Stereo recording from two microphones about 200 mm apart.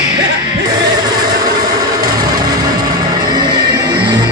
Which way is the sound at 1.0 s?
20° right (ahead or behind).